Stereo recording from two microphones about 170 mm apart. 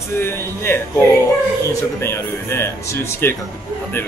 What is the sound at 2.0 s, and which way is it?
Speech, 15° left (ahead or behind).